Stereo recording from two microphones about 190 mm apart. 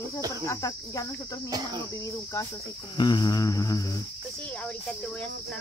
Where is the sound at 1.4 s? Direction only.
20° right (ahead or behind).